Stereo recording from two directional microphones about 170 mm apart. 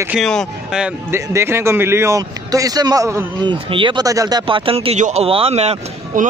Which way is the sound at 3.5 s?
30° right (ahead or behind).